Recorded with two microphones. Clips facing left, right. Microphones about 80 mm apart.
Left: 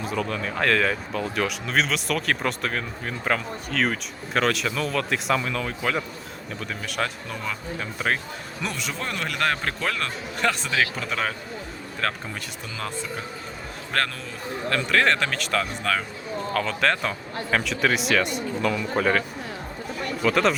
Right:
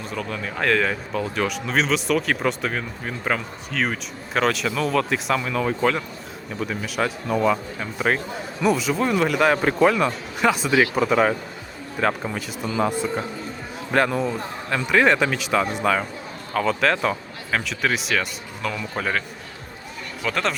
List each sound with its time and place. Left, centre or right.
0.0 s a man's voice: centre
13.9 s a man's voice: centre
20.2 s speech: centre